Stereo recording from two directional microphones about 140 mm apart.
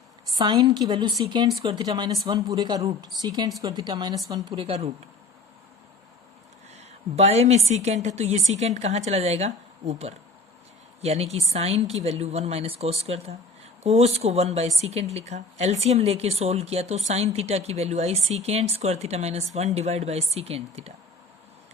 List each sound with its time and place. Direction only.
0.3 s a woman's voice: 30° right (ahead or behind)
6.7 s a woman's voice: 50° right (ahead or behind)